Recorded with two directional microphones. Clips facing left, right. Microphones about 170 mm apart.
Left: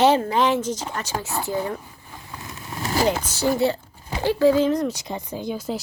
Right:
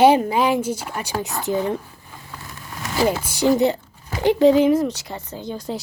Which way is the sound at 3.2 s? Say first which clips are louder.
Right 4 dB; 15° right (ahead or behind).